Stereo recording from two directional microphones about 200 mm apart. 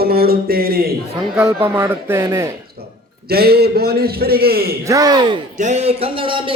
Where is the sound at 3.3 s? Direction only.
50° right (ahead or behind).